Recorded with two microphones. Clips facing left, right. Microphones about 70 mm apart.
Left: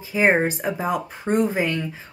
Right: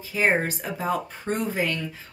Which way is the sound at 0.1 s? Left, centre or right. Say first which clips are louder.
Left 4 dB; left.